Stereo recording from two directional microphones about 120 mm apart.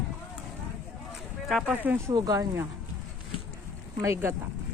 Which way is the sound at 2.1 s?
30° right (ahead or behind).